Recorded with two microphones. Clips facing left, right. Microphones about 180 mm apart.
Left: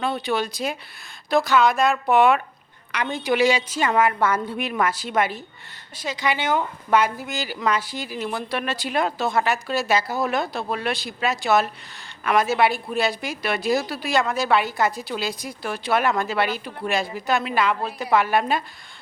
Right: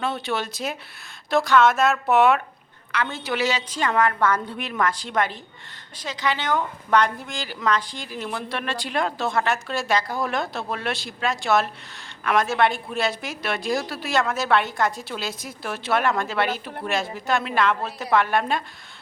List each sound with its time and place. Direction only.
0.0 s a woman's voice: centre (ahead or behind)
2.9 s a woman's voice: 15° left (ahead or behind)